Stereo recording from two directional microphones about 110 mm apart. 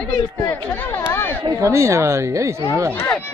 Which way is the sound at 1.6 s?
25° right (ahead or behind).